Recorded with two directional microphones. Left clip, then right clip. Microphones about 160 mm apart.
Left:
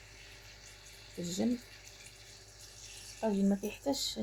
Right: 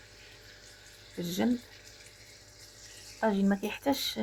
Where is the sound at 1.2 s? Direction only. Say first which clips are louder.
Right 4 dB; 10° right (ahead or behind).